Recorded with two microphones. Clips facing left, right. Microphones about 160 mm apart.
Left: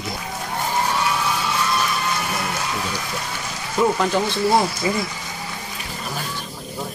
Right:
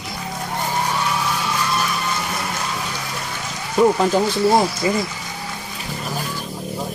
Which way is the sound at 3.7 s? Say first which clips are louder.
Right 4 dB; 15° right (ahead or behind).